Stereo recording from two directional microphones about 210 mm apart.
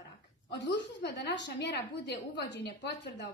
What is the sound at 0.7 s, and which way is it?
A woman's voice, 55° left (ahead or behind).